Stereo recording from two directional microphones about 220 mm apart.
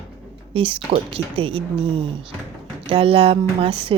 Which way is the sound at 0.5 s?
25° right (ahead or behind).